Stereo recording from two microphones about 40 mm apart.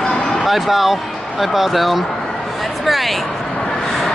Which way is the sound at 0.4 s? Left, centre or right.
Centre.